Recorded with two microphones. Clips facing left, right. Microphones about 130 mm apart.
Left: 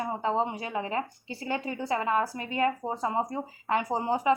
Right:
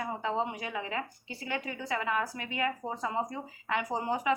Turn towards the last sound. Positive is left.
turn(degrees=30)  # may be behind; listen again after turning